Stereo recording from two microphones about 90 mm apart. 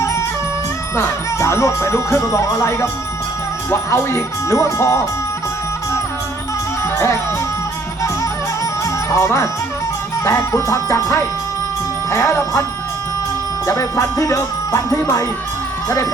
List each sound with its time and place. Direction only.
0.0 s music: 35° left (ahead or behind)
0.9 s speech: 30° left (ahead or behind)
6.9 s speech: 35° left (ahead or behind)
8.8 s music: 35° left (ahead or behind)
10.2 s speech: 35° left (ahead or behind)
13.7 s speech: 35° left (ahead or behind)